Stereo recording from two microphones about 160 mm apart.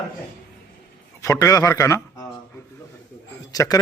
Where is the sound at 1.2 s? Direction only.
20° left (ahead or behind).